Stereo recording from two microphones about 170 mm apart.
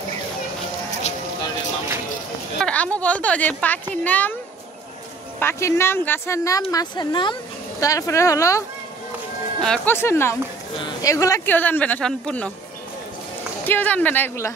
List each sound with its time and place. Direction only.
2.6 s speech: 5° left (ahead or behind)
5.4 s speech: 15° left (ahead or behind)
9.6 s speech: 5° left (ahead or behind)
13.7 s speech: 10° left (ahead or behind)